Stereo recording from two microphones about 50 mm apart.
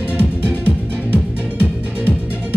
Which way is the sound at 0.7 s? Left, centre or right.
Left.